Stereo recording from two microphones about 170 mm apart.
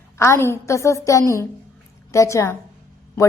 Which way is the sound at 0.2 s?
15° left (ahead or behind).